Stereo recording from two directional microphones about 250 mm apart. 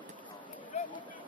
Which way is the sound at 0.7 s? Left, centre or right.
Left.